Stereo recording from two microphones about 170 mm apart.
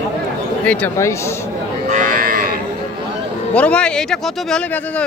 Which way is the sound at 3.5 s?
5° left (ahead or behind).